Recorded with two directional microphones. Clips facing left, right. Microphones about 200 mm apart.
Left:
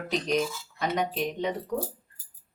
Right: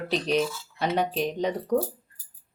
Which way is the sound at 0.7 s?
30° right (ahead or behind).